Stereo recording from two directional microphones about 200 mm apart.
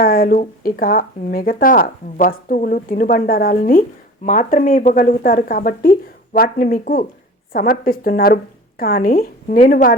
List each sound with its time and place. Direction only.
0.0 s speech: 45° left (ahead or behind)